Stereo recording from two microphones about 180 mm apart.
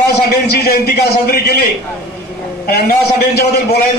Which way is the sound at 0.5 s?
60° left (ahead or behind).